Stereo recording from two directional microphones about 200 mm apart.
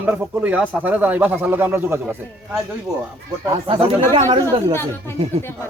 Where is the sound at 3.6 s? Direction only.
25° right (ahead or behind).